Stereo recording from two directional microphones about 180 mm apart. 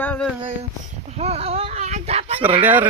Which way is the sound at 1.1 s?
35° right (ahead or behind).